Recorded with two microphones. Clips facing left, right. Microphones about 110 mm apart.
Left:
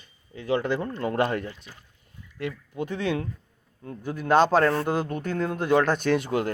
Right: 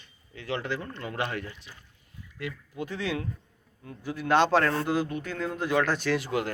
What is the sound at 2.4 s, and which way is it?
Speech, 20° left (ahead or behind).